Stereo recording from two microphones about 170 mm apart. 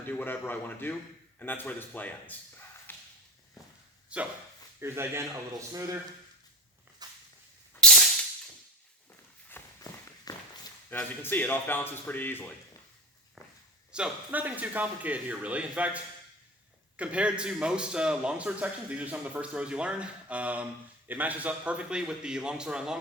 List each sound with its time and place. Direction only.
0.1 s speech: 10° left (ahead or behind)
4.1 s a man's voice: 5° right (ahead or behind)
7.0 s a sound: 25° right (ahead or behind)
7.8 s a sound: 5° left (ahead or behind)
9.5 s walk: 15° left (ahead or behind)
10.9 s speech: 10° left (ahead or behind)
13.9 s a man's voice: 10° right (ahead or behind)
17.0 s a man's voice: 5° right (ahead or behind)